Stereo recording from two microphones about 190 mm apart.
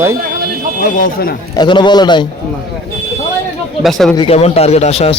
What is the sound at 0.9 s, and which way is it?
Speech, 50° left (ahead or behind).